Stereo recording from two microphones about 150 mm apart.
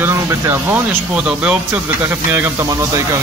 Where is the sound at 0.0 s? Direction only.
15° right (ahead or behind).